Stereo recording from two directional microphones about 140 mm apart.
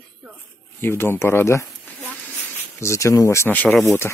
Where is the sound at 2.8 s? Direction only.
20° left (ahead or behind).